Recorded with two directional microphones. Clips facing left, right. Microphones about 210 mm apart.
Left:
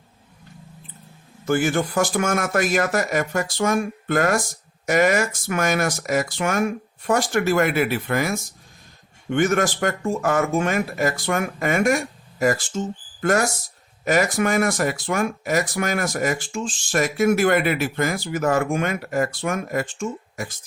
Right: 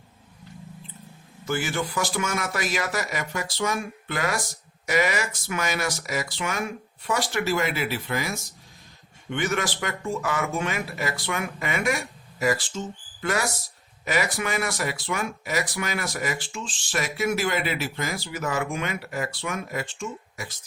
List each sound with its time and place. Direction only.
1.5 s speech: 50° left (ahead or behind)